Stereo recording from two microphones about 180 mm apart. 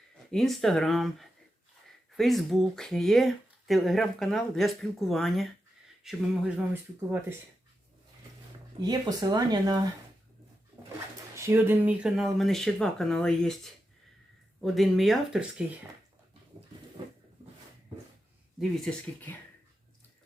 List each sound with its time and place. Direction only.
0.3 s speech: centre (ahead or behind)
8.8 s speech: 20° right (ahead or behind)
10.8 s pigeon: 15° right (ahead or behind)
11.3 s speech: 10° right (ahead or behind)
14.6 s speech: centre (ahead or behind)
18.9 s speech: 10° left (ahead or behind)